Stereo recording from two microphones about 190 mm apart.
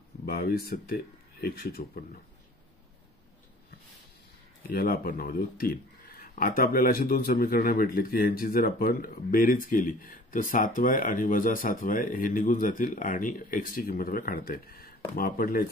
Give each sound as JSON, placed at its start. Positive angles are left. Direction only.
{"t": 0.2, "sound": "speech", "side_deg": 50}
{"t": 4.6, "sound": "speech", "side_deg": 50}